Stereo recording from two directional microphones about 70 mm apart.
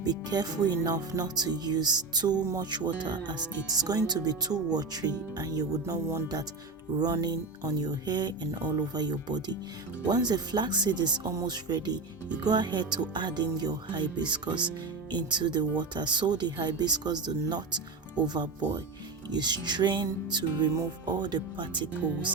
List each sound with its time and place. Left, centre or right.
0.0 s speech: right
2.6 s music: right
3.7 s speech: right
5.8 s speech: right
7.0 s speech: right
10.1 s music: right
11.4 s speech: right
12.4 s music: right
16.9 s speech: right
19.3 s music: right